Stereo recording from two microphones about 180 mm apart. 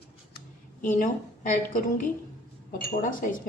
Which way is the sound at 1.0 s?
50° left (ahead or behind).